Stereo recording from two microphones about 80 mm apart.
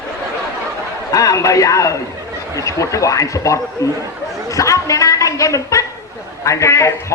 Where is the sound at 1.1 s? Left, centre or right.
Left.